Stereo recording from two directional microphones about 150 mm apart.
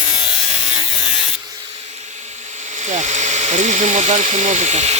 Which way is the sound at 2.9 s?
50° right (ahead or behind).